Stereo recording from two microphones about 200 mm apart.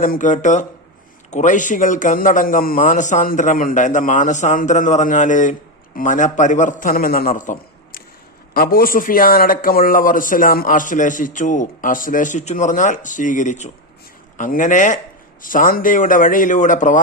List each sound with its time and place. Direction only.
0.0 s a man's voice: 40° left (ahead or behind)